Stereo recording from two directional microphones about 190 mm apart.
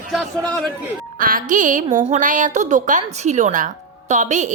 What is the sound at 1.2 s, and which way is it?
A woman's voice, 45° right (ahead or behind).